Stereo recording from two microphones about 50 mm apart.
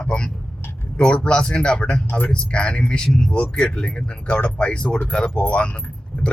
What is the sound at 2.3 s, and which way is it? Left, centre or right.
Speech, left.